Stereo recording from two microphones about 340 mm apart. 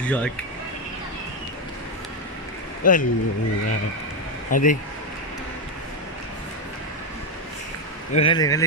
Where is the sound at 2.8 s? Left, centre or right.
Left.